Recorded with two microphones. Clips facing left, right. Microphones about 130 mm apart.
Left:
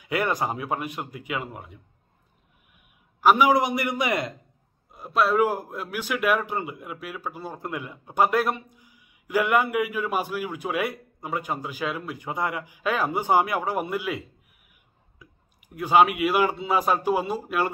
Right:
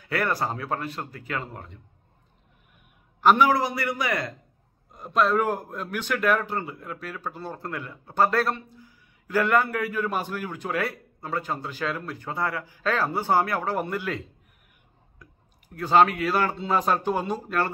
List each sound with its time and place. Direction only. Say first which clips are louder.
0.0 s a man's voice: left 1 dB; 15° left (ahead or behind)
3.2 s a man's voice: left 1 dB; 10° left (ahead or behind)
4.9 s a man's voice: left 1 dB; 5° left (ahead or behind)
15.2 s clicking: even; 5° left (ahead or behind)
15.7 s a man's voice: even; 10° left (ahead or behind)